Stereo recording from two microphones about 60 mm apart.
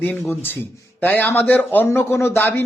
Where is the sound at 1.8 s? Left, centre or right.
Left.